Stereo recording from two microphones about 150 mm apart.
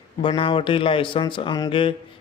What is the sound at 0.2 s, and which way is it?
A man's voice, 35° left (ahead or behind).